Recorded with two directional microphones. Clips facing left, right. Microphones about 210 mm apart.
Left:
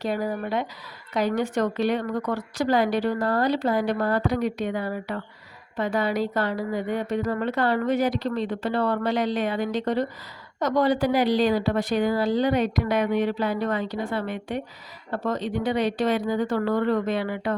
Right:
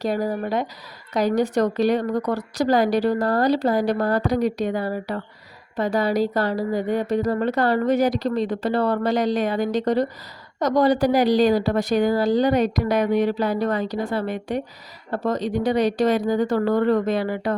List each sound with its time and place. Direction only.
0.0 s a woman's voice: 40° right (ahead or behind)